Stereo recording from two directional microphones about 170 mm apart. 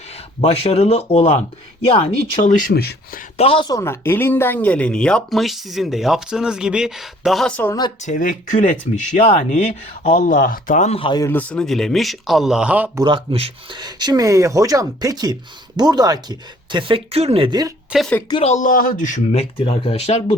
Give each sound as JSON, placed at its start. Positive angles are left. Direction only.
{"t": 0.4, "sound": "speech", "side_deg": 35}
{"t": 3.3, "sound": "speech", "side_deg": 35}
{"t": 3.7, "sound": "speech", "side_deg": 15}
{"t": 8.0, "sound": "speech", "side_deg": 50}
{"t": 11.2, "sound": "speech", "side_deg": 10}
{"t": 13.0, "sound": "speech", "side_deg": -30}
{"t": 17.9, "sound": "speech", "side_deg": 0}
{"t": 18.3, "sound": "speech", "side_deg": 30}
{"t": 18.5, "sound": "speech", "side_deg": 50}